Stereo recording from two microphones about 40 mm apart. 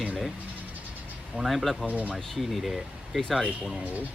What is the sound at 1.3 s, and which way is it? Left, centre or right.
Speech, centre.